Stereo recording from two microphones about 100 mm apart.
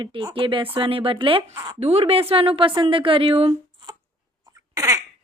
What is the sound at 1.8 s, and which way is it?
A woman's voice, 90° right.